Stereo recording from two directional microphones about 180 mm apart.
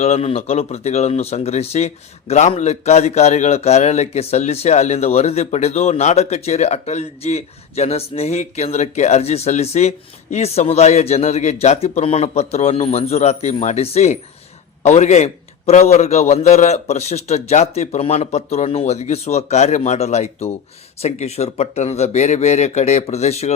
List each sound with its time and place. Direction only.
0.0 s speech: 35° left (ahead or behind)